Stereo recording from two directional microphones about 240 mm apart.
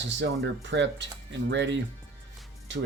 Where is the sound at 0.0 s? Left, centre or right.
Right.